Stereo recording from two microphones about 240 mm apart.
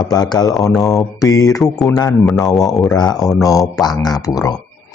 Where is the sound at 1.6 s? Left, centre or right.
Centre.